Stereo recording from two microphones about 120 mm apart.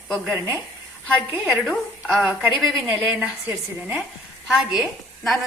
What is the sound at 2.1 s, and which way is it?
A woman's voice, centre (ahead or behind).